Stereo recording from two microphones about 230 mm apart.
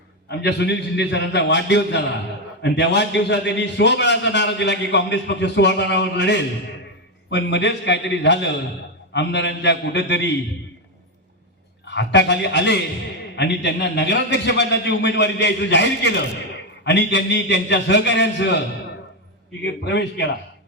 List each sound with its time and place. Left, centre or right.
0.3 s a man's voice: left
11.9 s a man's voice: left
19.8 s a man's voice: left